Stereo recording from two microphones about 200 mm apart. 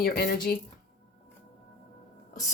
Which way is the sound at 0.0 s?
50° left (ahead or behind).